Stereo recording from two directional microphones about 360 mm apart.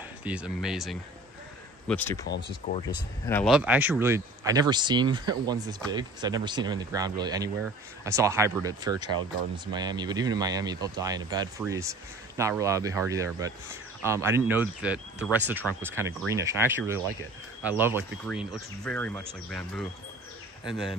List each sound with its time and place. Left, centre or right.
0.2 s speech: centre
2.6 s speech: centre
3.3 s speech: centre